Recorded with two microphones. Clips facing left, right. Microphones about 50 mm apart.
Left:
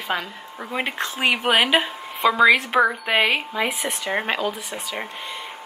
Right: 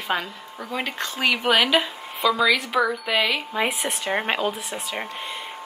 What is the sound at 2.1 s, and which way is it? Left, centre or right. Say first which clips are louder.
A woman's voice: left 4 dB; left.